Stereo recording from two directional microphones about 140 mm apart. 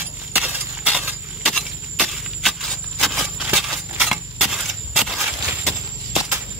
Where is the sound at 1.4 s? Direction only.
Centre (ahead or behind).